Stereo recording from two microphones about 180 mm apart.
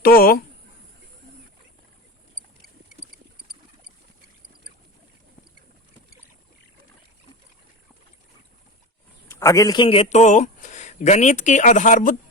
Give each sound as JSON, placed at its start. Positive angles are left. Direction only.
{"t": 0.0, "sound": "speech", "side_deg": 55}
{"t": 9.3, "sound": "a man's voice", "side_deg": 15}